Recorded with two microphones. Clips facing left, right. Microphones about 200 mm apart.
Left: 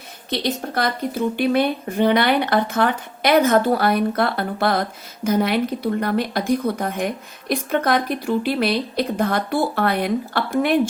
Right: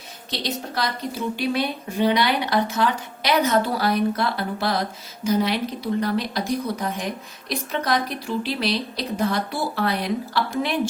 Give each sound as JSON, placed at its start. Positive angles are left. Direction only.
{"t": 0.3, "sound": "a woman's voice", "side_deg": 55}